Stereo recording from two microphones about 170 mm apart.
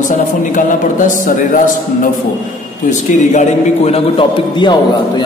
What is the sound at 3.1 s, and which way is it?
A man's voice, 40° left (ahead or behind).